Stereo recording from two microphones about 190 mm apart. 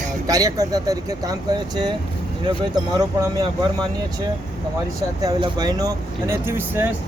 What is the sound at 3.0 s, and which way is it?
Speech, 20° right (ahead or behind).